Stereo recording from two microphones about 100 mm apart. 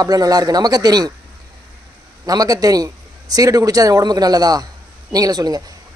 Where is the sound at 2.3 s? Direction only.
40° right (ahead or behind).